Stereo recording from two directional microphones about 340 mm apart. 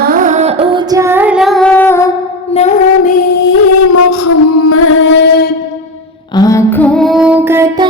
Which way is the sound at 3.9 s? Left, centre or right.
Left.